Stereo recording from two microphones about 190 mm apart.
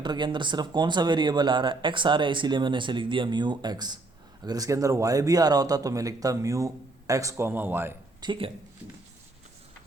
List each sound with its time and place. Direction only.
0.0 s speech: 25° right (ahead or behind)
8.2 s speech: 25° right (ahead or behind)